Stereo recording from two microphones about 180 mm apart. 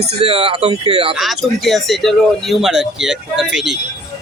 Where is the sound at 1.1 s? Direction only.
Centre (ahead or behind).